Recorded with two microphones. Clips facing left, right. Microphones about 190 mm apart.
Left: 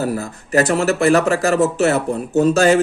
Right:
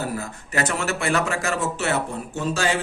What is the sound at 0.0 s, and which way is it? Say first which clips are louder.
Speech: left 7 dB; 40° left (ahead or behind).